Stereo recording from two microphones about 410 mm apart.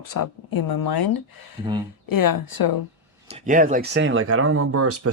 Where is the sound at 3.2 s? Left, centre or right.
Centre; by 5.1 s right.